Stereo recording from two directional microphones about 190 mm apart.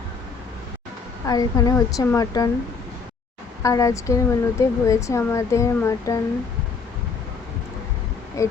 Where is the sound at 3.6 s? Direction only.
15° left (ahead or behind).